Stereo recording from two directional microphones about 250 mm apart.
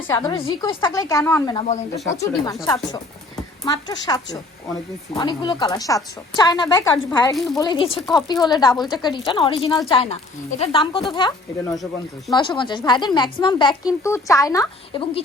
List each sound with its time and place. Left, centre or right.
0.1 s speech: centre
3.6 s speech: centre
7.3 s speech: centre
7.6 s a woman's voice: centre